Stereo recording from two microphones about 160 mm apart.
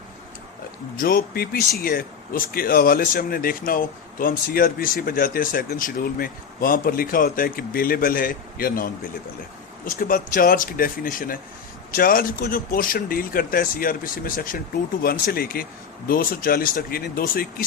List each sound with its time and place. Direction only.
0.9 s speech: 65° left (ahead or behind)
1.8 s speech: 65° left (ahead or behind)